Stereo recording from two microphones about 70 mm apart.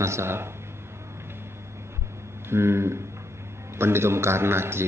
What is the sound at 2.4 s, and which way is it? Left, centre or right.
A man's voice, right.